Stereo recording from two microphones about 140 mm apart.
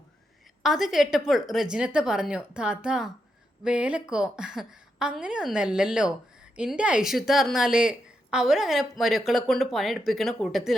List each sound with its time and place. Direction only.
0.6 s a woman's voice: centre (ahead or behind)